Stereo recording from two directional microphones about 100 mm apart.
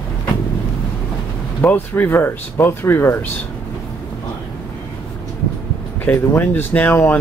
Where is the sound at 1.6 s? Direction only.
20° left (ahead or behind).